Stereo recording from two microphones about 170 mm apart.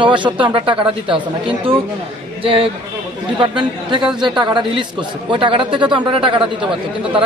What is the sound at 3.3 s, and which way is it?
Speech, 30° right (ahead or behind).